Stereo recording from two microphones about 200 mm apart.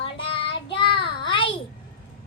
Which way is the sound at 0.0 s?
25° left (ahead or behind).